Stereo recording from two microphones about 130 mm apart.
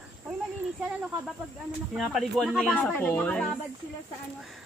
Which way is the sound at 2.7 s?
10° left (ahead or behind).